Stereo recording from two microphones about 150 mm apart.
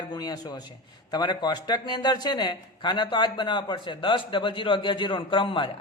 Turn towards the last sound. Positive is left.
turn(degrees=35)  # may be behind; listen again after turning